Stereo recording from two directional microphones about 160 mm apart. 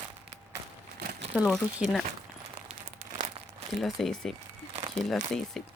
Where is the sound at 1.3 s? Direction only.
Centre (ahead or behind).